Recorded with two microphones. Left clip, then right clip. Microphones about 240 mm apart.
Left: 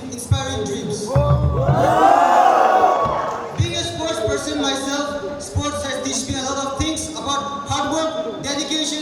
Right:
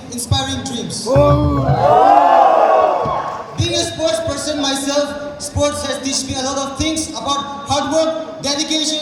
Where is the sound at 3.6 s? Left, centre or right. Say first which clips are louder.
Right 6 dB; right.